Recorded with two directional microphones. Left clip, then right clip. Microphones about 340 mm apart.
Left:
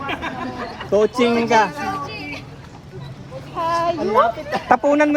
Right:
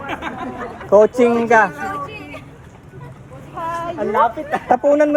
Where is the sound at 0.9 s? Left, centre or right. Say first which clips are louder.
Right 6 dB; centre.